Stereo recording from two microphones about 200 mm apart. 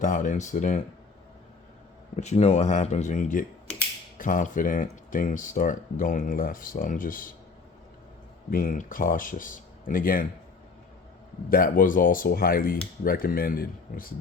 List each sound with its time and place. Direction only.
0.0 s speech: 40° left (ahead or behind)
2.1 s speech: 35° left (ahead or behind)
8.4 s speech: 45° left (ahead or behind)
11.4 s speech: 45° left (ahead or behind)